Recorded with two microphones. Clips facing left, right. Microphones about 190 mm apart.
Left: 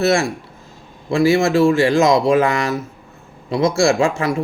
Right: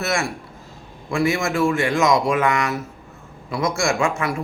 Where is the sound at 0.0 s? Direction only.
30° left (ahead or behind).